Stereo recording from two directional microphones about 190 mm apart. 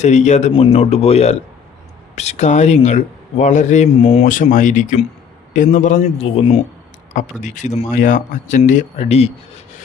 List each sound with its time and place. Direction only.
0.0 s speech: 35° left (ahead or behind)